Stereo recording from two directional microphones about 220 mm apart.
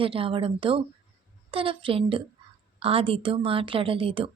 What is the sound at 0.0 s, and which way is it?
A woman's voice, 25° right (ahead or behind).